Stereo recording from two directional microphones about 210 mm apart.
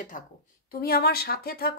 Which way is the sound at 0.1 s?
40° left (ahead or behind).